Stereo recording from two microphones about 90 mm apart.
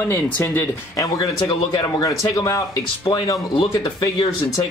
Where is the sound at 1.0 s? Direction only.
45° left (ahead or behind).